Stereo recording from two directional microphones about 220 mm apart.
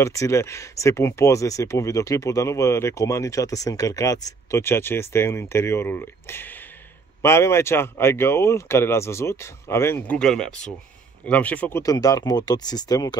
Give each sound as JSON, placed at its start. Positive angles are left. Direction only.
{"t": 0.0, "sound": "speech", "side_deg": 15}